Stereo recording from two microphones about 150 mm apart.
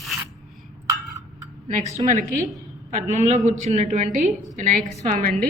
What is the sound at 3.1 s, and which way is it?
Speech, 50° right (ahead or behind).